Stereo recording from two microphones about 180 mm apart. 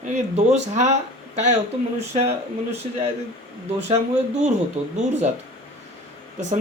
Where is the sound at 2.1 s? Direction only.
35° right (ahead or behind).